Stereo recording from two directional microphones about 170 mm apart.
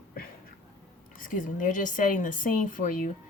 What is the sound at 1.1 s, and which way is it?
A woman's voice, 55° left (ahead or behind).